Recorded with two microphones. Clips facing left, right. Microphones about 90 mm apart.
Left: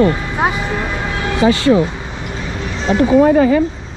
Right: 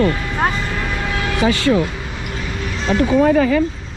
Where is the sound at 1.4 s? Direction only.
25° left (ahead or behind).